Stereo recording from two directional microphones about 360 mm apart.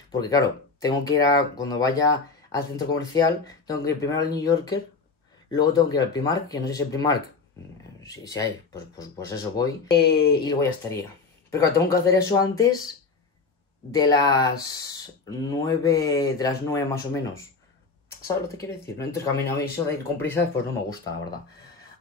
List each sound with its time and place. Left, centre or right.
0.1 s speech: centre
9.8 s speech: left
10.4 s speech: centre
13.9 s speech: centre